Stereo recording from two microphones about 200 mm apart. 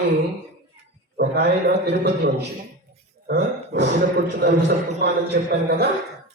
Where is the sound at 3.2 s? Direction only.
55° right (ahead or behind).